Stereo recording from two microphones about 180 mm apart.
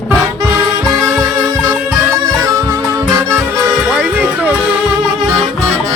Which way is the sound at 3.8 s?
5° right (ahead or behind).